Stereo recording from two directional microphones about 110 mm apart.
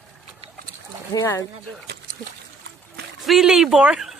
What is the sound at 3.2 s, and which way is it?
Speech, centre (ahead or behind).